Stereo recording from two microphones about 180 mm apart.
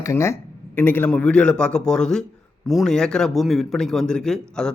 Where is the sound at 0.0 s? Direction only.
15° left (ahead or behind).